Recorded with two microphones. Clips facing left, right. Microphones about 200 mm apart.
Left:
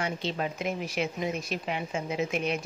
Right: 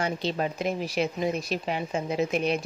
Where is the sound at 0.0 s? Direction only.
35° right (ahead or behind).